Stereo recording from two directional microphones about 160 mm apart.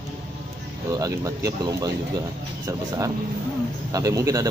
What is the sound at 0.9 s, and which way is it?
Speech, 20° right (ahead or behind).